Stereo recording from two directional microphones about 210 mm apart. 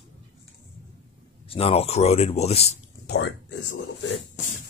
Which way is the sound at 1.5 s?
25° left (ahead or behind).